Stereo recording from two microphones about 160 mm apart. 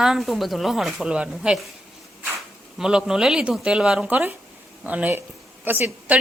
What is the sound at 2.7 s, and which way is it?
A woman's voice, 5° right (ahead or behind).